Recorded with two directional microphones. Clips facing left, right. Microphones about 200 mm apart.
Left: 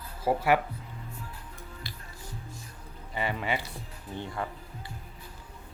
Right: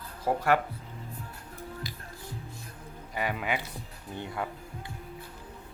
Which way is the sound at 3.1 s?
10° right (ahead or behind).